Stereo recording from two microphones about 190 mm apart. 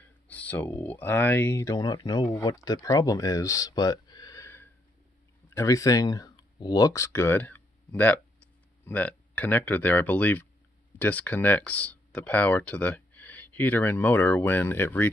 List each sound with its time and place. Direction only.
0.3 s speech: 10° left (ahead or behind)